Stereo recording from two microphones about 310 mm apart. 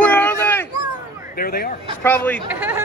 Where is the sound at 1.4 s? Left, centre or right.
Left.